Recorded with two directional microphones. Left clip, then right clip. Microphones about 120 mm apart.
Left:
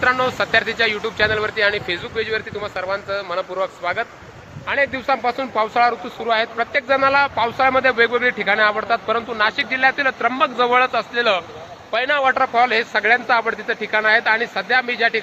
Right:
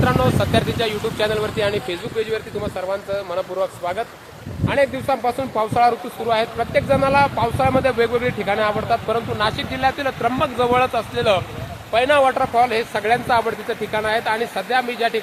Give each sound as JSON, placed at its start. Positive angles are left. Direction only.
{"t": 0.3, "sound": "speech", "side_deg": -15}